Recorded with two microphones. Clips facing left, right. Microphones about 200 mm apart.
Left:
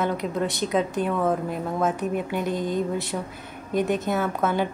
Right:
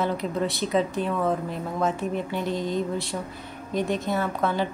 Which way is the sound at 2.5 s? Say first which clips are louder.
Even; 50° left (ahead or behind).